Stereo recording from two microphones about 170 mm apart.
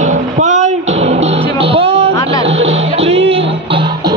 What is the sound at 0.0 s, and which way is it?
Music, 45° right (ahead or behind).